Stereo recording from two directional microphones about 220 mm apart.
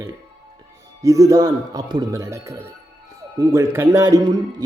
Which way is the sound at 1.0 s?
15° right (ahead or behind).